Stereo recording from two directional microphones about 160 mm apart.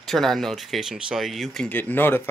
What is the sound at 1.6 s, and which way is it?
Speech, 10° left (ahead or behind).